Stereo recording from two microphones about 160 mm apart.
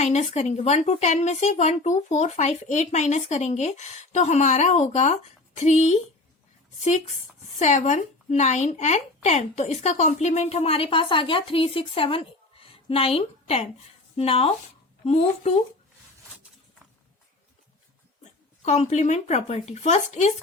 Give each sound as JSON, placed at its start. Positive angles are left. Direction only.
{"t": 0.0, "sound": "speech", "side_deg": 45}
{"t": 7.6, "sound": "speech", "side_deg": 45}
{"t": 18.6, "sound": "speech", "side_deg": 45}